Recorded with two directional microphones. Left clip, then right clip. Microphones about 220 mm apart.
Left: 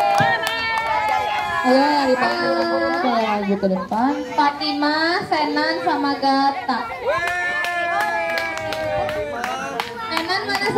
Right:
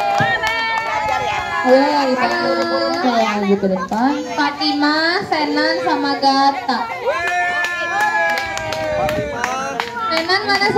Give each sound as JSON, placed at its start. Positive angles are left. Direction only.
{"t": 0.1, "sound": "run", "side_deg": 35}
{"t": 1.6, "sound": "speech", "side_deg": 35}
{"t": 3.9, "sound": "a woman's voice", "side_deg": -5}